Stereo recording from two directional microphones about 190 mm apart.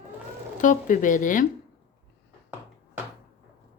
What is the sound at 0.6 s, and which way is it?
Speech, 40° left (ahead or behind).